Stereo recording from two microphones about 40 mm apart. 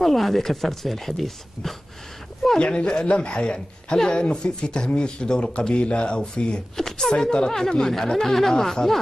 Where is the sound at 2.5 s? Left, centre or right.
Left.